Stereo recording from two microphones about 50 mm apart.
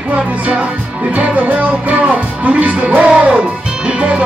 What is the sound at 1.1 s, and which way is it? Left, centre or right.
Music, right.